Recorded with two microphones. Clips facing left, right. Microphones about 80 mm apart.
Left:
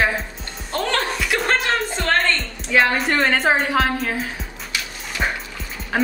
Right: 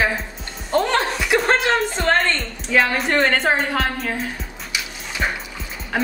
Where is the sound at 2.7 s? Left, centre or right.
Centre.